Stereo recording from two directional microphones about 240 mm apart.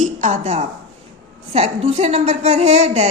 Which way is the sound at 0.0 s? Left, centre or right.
Right.